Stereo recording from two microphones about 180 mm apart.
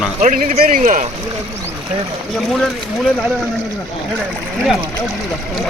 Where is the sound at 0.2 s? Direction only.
45° right (ahead or behind).